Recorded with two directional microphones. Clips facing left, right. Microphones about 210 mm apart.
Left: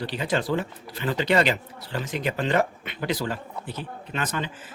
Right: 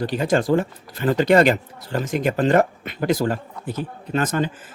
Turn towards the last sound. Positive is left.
turn(degrees=-45)  # may be behind; listen again after turning